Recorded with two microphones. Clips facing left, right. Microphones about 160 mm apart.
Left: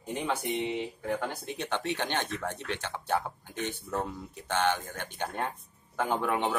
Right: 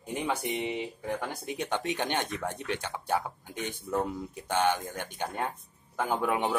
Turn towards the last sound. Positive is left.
turn(degrees=-10)  # may be behind; listen again after turning